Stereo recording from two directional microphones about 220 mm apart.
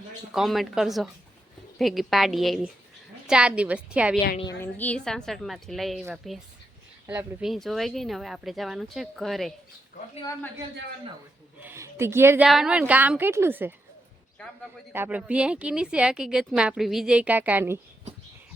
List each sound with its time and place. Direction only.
0.3 s speech: centre (ahead or behind)
4.6 s speech: 5° left (ahead or behind)
7.1 s speech: 5° right (ahead or behind)
11.6 s a woman's voice: 10° right (ahead or behind)
14.3 s speech: 5° left (ahead or behind)
14.9 s speech: 10° right (ahead or behind)